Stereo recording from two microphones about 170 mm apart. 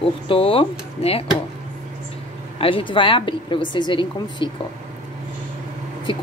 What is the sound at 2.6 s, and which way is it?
A woman's voice, 30° left (ahead or behind).